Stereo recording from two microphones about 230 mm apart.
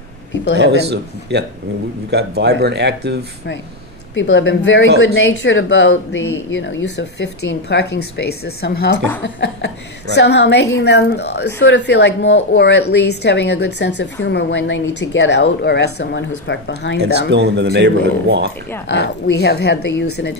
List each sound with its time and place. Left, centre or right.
0.6 s speech: right
4.1 s speech: left
17.3 s speech: right
18.9 s speech: left